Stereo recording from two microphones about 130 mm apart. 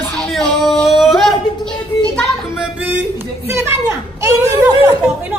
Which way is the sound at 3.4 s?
20° right (ahead or behind).